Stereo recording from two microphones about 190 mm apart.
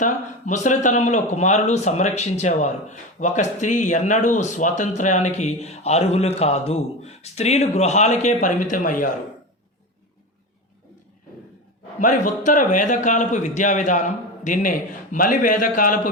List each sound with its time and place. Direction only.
0.0 s a man's voice: 40° left (ahead or behind)
11.9 s a man's voice: 40° left (ahead or behind)